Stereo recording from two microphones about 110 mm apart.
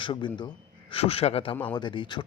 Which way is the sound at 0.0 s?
45° left (ahead or behind).